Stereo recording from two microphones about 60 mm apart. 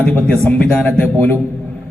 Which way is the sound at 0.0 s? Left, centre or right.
Left.